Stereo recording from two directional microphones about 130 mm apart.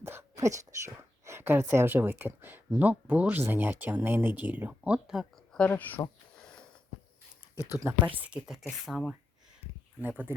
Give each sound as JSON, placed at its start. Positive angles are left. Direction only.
{"t": 0.0, "sound": "a sound", "side_deg": -20}
{"t": 1.2, "sound": "speech", "side_deg": -20}
{"t": 5.5, "sound": "a sound", "side_deg": 10}
{"t": 7.7, "sound": "speech", "side_deg": -20}
{"t": 8.3, "sound": "speech", "side_deg": -5}
{"t": 10.0, "sound": "speech", "side_deg": -15}